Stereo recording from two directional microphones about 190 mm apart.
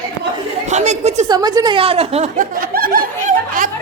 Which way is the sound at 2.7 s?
50° right (ahead or behind).